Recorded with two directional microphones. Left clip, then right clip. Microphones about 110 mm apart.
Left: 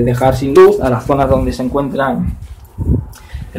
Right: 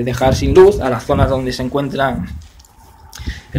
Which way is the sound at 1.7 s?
15° right (ahead or behind).